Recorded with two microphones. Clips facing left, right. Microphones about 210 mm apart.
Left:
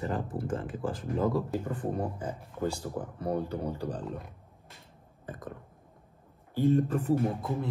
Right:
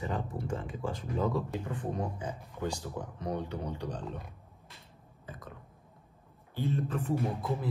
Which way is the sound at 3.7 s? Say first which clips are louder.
Left 3 dB; 5° left (ahead or behind).